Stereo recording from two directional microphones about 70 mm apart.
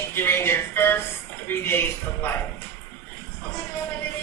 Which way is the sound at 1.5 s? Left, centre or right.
Left.